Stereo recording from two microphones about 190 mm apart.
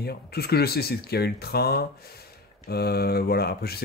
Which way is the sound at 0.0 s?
55° left (ahead or behind).